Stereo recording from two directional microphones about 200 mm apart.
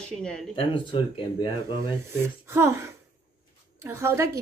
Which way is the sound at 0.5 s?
25° left (ahead or behind).